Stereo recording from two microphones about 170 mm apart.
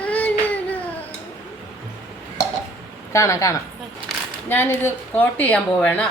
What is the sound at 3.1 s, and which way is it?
Speech, 20° left (ahead or behind).